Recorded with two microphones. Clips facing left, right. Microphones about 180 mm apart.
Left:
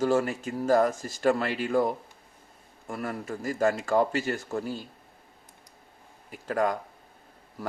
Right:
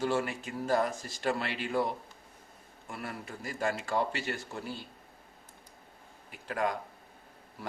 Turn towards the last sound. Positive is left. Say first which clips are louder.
# left 6 dB
turn(degrees=40)  # may be behind; listen again after turning